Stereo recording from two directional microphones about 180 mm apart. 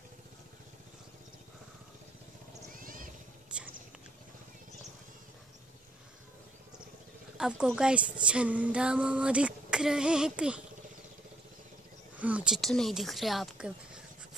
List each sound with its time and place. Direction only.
2.7 s a sound: 50° right (ahead or behind)
7.3 s female singing: 5° right (ahead or behind)
12.2 s female singing: 10° right (ahead or behind)